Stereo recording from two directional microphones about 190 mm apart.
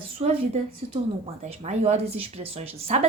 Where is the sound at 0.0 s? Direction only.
30° right (ahead or behind).